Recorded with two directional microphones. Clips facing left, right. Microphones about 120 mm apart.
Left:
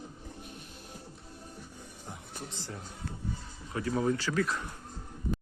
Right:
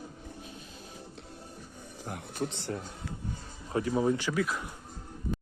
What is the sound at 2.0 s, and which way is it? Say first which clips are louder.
Speech: right 10 dB; 70° right (ahead or behind).